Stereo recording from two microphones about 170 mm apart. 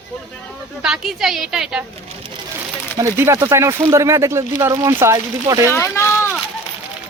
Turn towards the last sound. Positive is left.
turn(degrees=15)  # may be behind; listen again after turning